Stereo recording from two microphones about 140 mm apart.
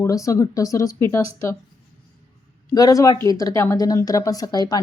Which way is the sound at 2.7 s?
25° left (ahead or behind).